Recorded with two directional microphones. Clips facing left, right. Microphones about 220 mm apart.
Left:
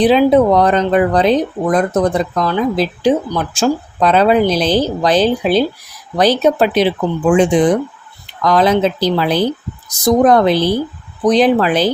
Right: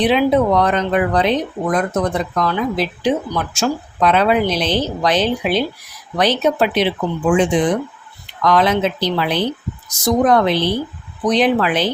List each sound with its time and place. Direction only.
0.0 s speech: 35° left (ahead or behind)